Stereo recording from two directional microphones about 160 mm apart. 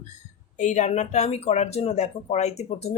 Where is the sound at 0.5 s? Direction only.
50° left (ahead or behind).